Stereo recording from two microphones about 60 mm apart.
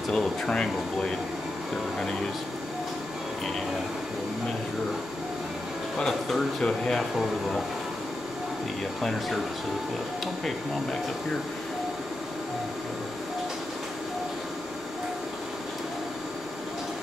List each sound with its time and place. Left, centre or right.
0.1 s speech: centre
5.9 s speech: centre
10.2 s speech: centre